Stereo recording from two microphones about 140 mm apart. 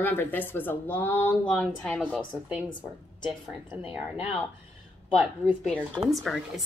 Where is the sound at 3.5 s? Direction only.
5° right (ahead or behind).